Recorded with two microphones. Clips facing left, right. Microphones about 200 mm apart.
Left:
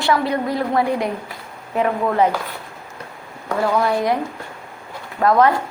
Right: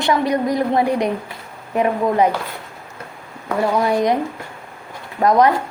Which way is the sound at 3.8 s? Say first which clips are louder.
Right 2 dB; 20° right (ahead or behind).